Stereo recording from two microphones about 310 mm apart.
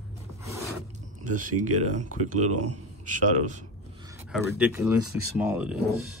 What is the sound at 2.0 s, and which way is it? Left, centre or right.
Speech, right.